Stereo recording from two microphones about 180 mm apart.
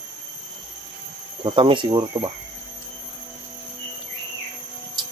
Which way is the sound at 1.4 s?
30° right (ahead or behind).